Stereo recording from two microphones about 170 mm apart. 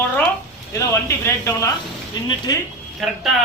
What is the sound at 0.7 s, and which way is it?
Speech, 15° left (ahead or behind).